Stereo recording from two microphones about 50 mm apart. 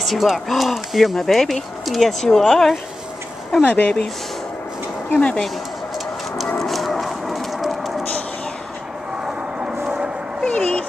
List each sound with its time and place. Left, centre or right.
0.0 s speech: centre
3.6 s speech: left
5.1 s speech: left
6.6 s a sound: centre
9.6 s vehicle: right
10.4 s a sound: left